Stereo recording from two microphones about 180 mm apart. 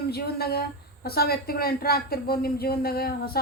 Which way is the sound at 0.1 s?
60° left (ahead or behind).